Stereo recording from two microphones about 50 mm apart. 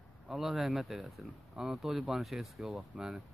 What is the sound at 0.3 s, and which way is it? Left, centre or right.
Speech, centre.